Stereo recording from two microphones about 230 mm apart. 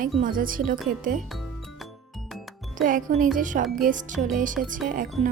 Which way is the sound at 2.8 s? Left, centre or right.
Right.